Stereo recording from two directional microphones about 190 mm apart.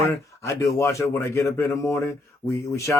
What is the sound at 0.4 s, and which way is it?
Speech, 15° left (ahead or behind).